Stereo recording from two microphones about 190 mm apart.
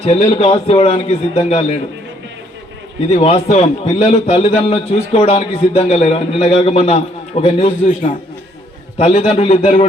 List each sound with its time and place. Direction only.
0.0 s a man's voice: 35° left (ahead or behind)
3.1 s a man's voice: 30° left (ahead or behind)